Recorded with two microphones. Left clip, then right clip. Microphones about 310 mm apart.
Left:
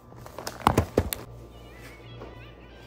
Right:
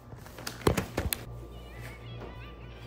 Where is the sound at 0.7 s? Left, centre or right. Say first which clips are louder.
Left 7 dB; left.